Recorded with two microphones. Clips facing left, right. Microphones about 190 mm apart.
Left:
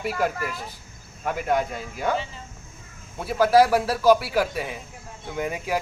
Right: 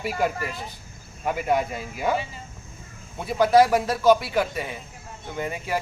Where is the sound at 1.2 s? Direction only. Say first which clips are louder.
Right 1 dB; 5° right (ahead or behind).